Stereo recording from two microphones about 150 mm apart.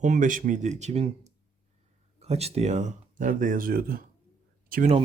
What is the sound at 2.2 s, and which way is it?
Speech, 45° right (ahead or behind).